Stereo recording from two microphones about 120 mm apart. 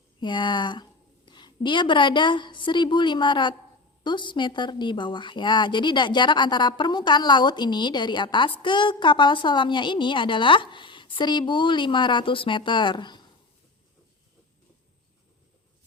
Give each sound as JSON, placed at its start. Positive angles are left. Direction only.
{"t": 0.2, "sound": "a woman's voice", "side_deg": 40}